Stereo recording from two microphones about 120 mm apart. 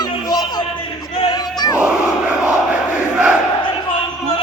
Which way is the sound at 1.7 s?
10° right (ahead or behind).